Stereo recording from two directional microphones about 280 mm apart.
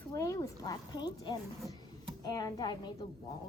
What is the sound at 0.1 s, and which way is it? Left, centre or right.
A woman's voice, centre.